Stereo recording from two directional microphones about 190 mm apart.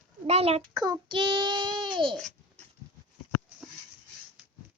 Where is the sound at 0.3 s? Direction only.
35° right (ahead or behind).